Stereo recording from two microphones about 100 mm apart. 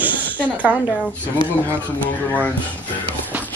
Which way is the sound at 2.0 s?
15° left (ahead or behind).